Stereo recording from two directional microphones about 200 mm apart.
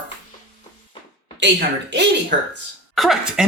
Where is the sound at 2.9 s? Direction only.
Centre (ahead or behind).